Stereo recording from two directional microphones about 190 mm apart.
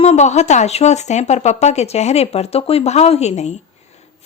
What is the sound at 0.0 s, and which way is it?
Speech, 35° left (ahead or behind).